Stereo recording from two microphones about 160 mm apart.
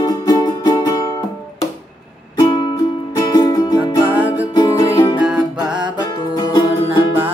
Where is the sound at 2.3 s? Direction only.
25° left (ahead or behind).